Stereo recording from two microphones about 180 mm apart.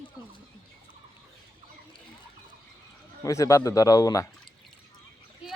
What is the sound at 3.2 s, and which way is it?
Speech, 15° left (ahead or behind).